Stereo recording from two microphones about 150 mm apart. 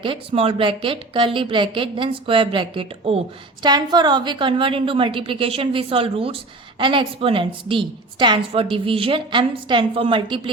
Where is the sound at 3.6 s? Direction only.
30° right (ahead or behind).